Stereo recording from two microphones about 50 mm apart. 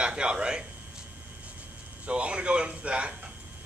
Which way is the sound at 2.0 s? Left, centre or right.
Right.